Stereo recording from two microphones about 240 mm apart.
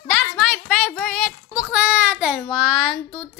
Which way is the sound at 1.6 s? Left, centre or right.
Centre.